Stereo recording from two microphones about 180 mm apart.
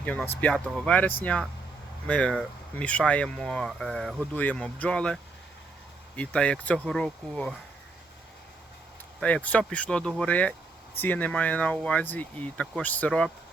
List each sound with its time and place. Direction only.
0.0 s speech: 10° left (ahead or behind)
9.2 s speech: 5° left (ahead or behind)